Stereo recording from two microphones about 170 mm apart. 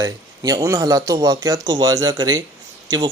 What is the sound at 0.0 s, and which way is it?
Speech, 20° right (ahead or behind).